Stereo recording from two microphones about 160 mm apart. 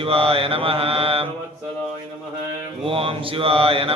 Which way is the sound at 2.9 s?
35° right (ahead or behind).